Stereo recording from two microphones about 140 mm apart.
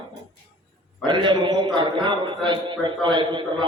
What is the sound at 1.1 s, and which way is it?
A man's voice, 35° right (ahead or behind).